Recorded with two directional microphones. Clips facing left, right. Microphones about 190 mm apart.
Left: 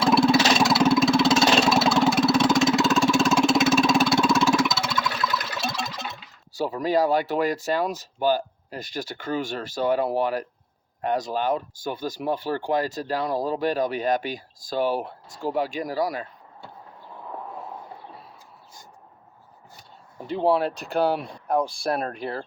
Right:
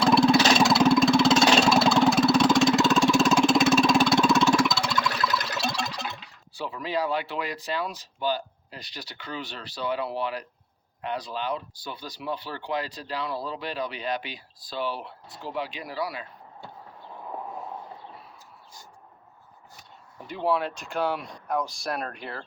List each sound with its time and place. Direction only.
0.0 s a sound: centre (ahead or behind)
6.5 s speech: 40° left (ahead or behind)
20.2 s speech: 30° left (ahead or behind)